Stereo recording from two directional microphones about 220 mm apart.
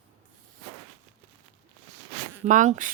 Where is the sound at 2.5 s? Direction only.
35° right (ahead or behind).